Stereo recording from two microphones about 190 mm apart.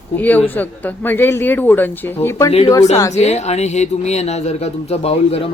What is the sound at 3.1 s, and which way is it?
A man's voice, 35° left (ahead or behind).